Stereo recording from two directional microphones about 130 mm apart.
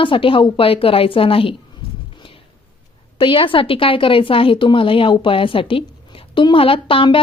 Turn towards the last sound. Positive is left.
turn(degrees=45)  # may be behind; listen again after turning